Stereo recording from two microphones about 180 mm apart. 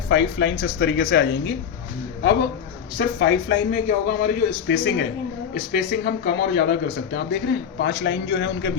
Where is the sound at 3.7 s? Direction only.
55° left (ahead or behind).